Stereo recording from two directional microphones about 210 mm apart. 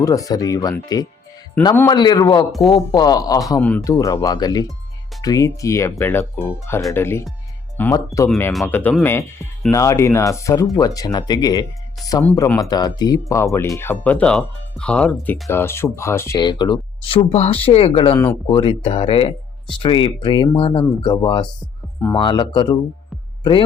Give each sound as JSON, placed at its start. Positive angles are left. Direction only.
{"t": 0.0, "sound": "speech", "side_deg": 15}